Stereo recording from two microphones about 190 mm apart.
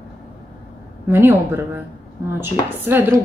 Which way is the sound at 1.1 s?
10° right (ahead or behind).